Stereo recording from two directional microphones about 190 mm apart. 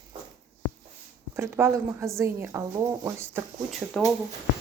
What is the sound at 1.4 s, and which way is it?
Speech, 15° right (ahead or behind).